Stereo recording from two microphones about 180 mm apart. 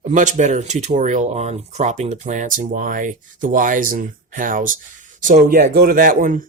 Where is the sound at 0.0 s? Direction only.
45° right (ahead or behind).